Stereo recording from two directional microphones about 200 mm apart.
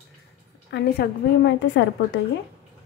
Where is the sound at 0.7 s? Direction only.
60° left (ahead or behind).